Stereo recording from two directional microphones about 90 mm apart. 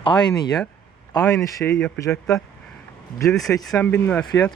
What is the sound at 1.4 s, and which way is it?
Speech, 35° left (ahead or behind).